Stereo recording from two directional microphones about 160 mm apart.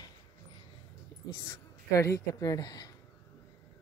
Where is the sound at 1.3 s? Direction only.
20° left (ahead or behind).